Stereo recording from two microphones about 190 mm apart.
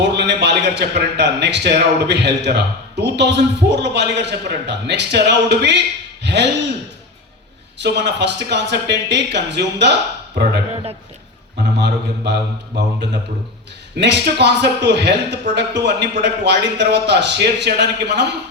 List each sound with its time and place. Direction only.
0.0 s a man's voice: 65° right (ahead or behind)
7.8 s a man's voice: 65° right (ahead or behind)
11.8 s a man's voice: 65° right (ahead or behind)